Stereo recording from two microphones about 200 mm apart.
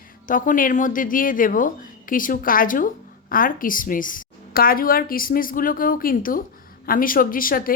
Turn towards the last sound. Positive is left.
turn(degrees=45)  # may be behind; listen again after turning